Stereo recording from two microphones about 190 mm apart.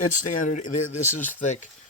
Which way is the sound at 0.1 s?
40° left (ahead or behind).